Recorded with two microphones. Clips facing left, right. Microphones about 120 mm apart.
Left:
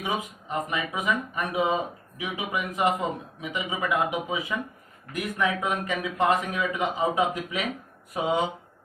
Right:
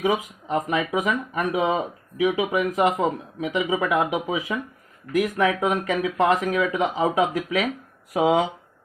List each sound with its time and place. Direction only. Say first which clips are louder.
0.0 s speech: right 7 dB; 90° right